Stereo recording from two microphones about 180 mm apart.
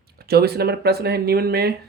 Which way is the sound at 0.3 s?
60° right (ahead or behind).